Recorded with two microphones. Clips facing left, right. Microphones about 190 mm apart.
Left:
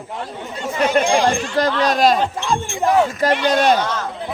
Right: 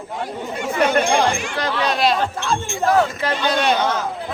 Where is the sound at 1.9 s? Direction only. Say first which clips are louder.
Left 2 dB; 45° left (ahead or behind).